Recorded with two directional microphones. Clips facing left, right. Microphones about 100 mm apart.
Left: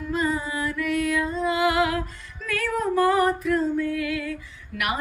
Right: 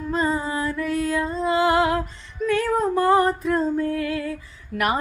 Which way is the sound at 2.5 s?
30° right (ahead or behind).